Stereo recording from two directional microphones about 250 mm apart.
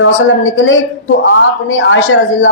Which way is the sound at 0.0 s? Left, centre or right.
Left.